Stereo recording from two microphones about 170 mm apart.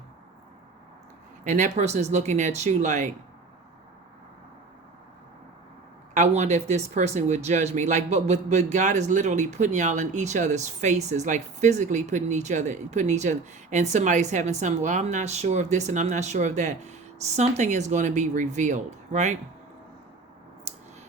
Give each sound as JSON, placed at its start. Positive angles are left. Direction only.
{"t": 1.5, "sound": "speech", "side_deg": -45}
{"t": 6.1, "sound": "speech", "side_deg": -40}